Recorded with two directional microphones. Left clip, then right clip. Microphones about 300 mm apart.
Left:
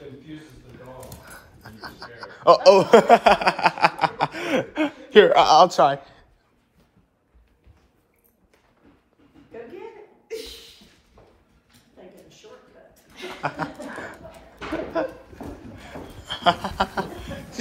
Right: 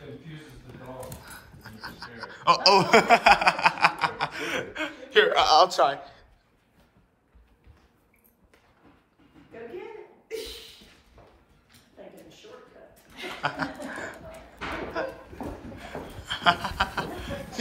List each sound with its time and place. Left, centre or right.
1.2 s chuckle: centre
5.9 s a man's voice: centre
13.4 s chuckle: centre
15.0 s a sound: centre
15.8 s chuckle: centre